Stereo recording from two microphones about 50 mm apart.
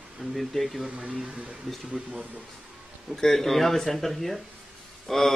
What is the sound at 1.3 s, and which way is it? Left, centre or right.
Speech, right.